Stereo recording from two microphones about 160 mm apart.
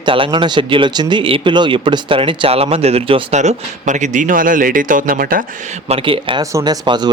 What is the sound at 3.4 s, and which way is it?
Speech, 50° right (ahead or behind).